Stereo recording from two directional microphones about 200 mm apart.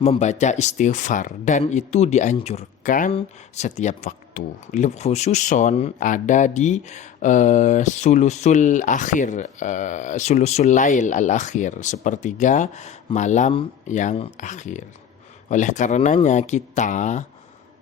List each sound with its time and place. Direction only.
0.0 s speech: 35° left (ahead or behind)